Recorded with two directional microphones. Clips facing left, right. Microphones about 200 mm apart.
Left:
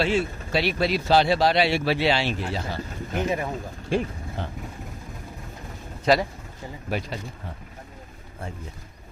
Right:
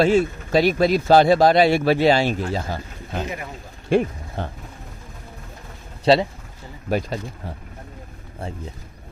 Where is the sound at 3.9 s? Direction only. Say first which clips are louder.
Right 6 dB; 55° right (ahead or behind).